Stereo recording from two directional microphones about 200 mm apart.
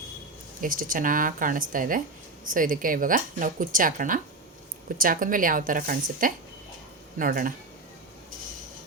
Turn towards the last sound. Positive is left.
turn(degrees=-45)  # may be behind; listen again after turning